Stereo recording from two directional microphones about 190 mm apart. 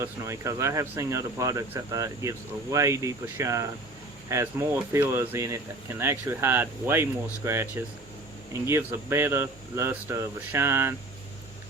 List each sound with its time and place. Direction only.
0.0 s speech: 15° right (ahead or behind)